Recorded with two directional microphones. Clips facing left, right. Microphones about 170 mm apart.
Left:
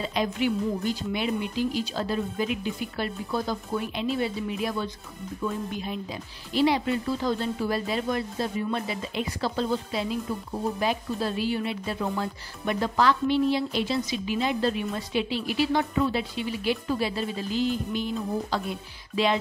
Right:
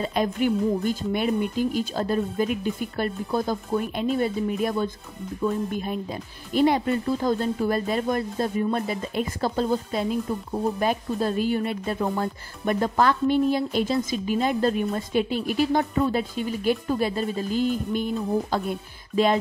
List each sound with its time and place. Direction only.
0.0 s speech: 50° right (ahead or behind)